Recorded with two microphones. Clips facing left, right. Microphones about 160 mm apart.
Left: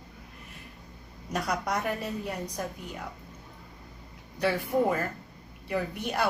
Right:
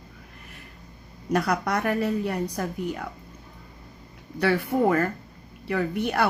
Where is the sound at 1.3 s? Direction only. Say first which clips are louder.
Right 5 dB; 65° right (ahead or behind).